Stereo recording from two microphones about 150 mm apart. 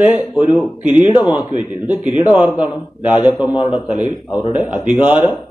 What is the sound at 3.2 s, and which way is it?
Speech, 30° left (ahead or behind).